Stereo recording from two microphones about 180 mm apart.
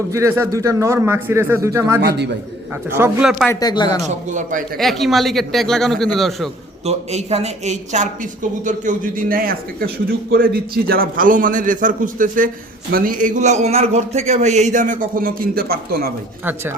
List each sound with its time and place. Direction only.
0.1 s speech: 15° right (ahead or behind)
2.0 s a man's voice: 70° right (ahead or behind)
2.9 s a man's voice: 10° right (ahead or behind)
3.4 s speech: 15° left (ahead or behind)
4.0 s speech: 40° right (ahead or behind)
4.8 s a man's voice: centre (ahead or behind)
6.8 s speech: 35° right (ahead or behind); by 16.1 s 60° right (ahead or behind)